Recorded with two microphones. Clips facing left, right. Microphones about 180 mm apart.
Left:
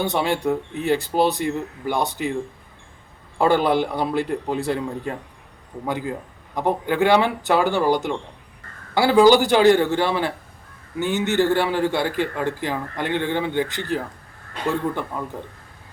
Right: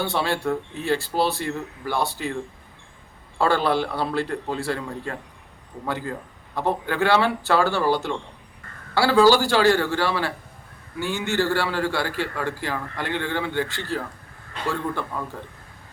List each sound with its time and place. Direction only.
0.0 s speech: 20° left (ahead or behind)
3.3 s a man's voice: 15° left (ahead or behind)